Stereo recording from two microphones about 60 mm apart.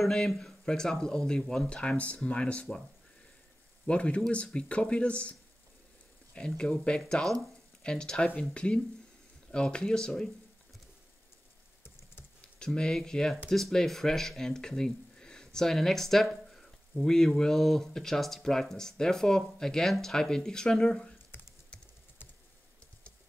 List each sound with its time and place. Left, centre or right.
0.0 s speech: centre
3.8 s speech: centre
11.8 s typing: left
12.5 s speech: centre
21.3 s typing: left